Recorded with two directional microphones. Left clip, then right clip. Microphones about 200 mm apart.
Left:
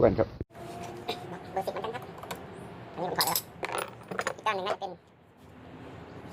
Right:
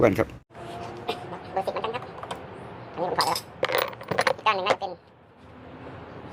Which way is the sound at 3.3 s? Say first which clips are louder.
Right 8 dB; 15° right (ahead or behind).